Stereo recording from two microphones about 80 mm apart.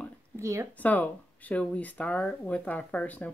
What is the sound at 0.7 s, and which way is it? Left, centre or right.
Speech, centre.